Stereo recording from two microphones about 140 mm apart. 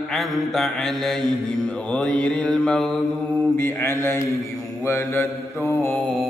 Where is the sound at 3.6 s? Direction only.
20° left (ahead or behind).